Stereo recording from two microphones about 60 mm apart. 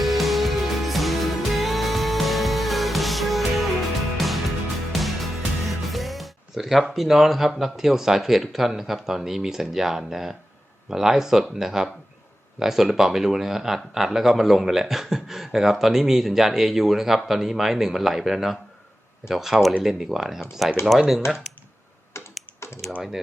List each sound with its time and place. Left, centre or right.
0.0 s music: centre
10.8 s speech: centre
22.1 s computer keyboard: left